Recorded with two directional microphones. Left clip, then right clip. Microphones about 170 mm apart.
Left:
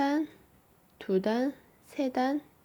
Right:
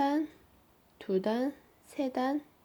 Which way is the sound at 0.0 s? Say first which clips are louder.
Left 1 dB; 10° left (ahead or behind).